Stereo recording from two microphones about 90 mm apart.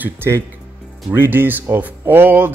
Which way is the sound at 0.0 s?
25° right (ahead or behind).